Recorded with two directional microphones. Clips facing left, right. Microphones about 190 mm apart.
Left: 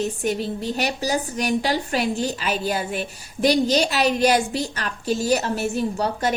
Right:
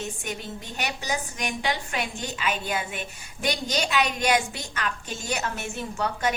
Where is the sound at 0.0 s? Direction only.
35° left (ahead or behind).